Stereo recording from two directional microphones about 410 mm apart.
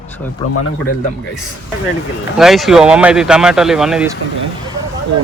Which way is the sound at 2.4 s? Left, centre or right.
Centre.